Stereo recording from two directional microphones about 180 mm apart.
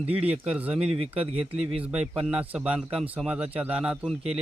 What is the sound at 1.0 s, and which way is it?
Speech, 30° right (ahead or behind).